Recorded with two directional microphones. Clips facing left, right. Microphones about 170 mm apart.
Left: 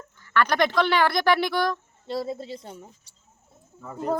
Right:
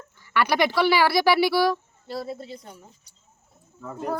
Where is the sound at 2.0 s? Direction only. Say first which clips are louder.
Left 3 dB; 20° left (ahead or behind).